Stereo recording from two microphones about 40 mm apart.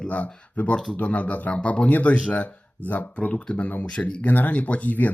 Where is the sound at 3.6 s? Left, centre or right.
Left.